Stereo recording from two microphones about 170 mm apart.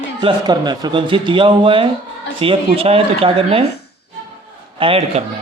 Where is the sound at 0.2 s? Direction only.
25° right (ahead or behind).